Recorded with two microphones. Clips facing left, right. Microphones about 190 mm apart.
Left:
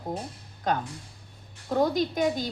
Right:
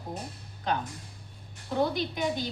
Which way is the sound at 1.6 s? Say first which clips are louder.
Left 4 dB; 45° left (ahead or behind).